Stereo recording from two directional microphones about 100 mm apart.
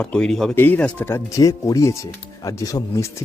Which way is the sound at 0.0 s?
10° left (ahead or behind).